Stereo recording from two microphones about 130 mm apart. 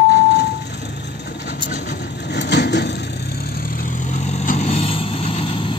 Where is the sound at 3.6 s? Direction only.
90° left.